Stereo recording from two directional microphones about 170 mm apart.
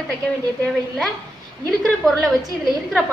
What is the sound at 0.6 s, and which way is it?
A woman's voice, centre (ahead or behind).